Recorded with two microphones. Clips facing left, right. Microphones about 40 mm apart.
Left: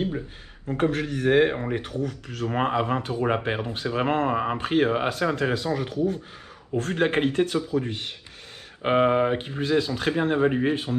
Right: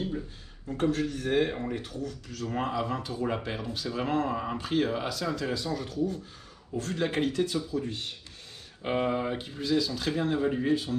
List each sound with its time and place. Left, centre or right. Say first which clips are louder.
0.7 s speech: left 3 dB; left